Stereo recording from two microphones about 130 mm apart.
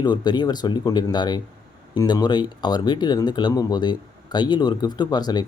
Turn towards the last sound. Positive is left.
turn(degrees=30)  # may be behind; listen again after turning